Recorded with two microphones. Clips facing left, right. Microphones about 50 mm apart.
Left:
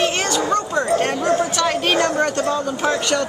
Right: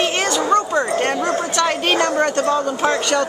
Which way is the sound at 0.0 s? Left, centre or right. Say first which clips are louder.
Right 1 dB; centre.